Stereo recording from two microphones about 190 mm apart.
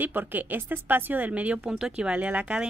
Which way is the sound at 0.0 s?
10° right (ahead or behind).